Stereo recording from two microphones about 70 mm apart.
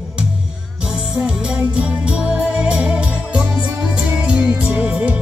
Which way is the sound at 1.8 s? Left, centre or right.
Centre.